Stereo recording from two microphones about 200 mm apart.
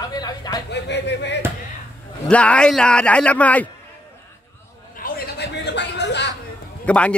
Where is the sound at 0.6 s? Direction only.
60° left (ahead or behind).